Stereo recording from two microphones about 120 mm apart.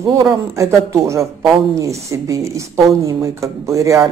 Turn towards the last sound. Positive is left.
turn(degrees=-25)  # may be behind; listen again after turning